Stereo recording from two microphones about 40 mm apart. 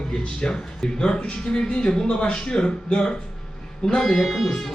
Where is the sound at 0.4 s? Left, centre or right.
Left.